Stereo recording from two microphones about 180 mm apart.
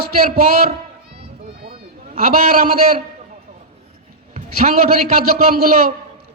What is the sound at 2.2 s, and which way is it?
Speech, 50° right (ahead or behind).